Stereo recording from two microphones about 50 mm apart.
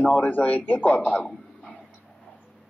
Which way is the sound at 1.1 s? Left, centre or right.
Centre.